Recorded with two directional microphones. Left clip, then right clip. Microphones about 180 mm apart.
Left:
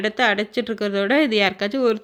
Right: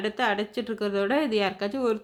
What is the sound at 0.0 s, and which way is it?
A woman's voice, 25° left (ahead or behind).